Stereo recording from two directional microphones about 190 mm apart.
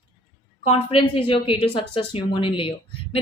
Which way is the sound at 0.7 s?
30° left (ahead or behind).